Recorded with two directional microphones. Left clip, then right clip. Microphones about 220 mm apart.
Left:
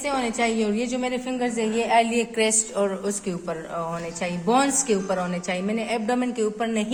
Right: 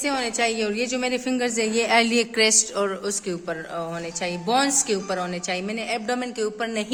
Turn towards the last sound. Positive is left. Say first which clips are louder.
# left 1 dB
turn(degrees=-40)  # may be behind; listen again after turning